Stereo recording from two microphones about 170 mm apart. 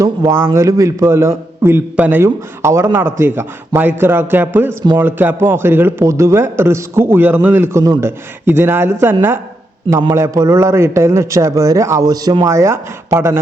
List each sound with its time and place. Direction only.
0.0 s a man's voice: 15° right (ahead or behind)